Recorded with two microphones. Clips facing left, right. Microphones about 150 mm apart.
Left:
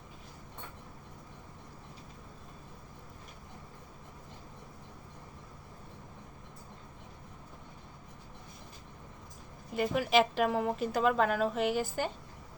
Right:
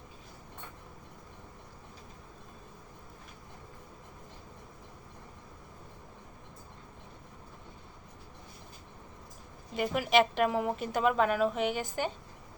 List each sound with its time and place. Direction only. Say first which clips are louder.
9.7 s a woman's voice: right 1 dB; 5° right (ahead or behind)